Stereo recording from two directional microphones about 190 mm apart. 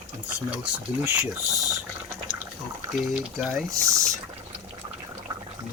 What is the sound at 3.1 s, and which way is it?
Speech, centre (ahead or behind).